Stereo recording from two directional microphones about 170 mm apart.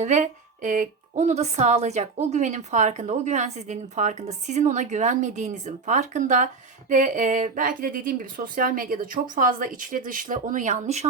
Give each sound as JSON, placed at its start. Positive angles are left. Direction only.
{"t": 0.0, "sound": "a woman's voice", "side_deg": -45}